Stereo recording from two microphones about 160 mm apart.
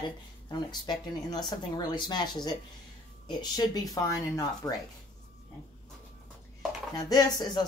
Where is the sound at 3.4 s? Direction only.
25° left (ahead or behind).